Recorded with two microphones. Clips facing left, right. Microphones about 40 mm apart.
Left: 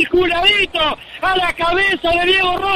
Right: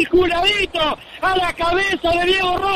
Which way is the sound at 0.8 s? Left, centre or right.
Centre.